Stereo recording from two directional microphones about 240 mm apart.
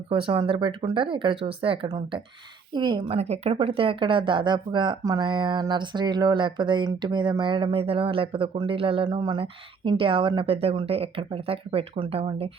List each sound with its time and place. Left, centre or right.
0.1 s speech: right